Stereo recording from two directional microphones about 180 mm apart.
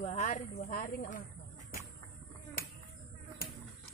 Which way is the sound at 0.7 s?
50° left (ahead or behind).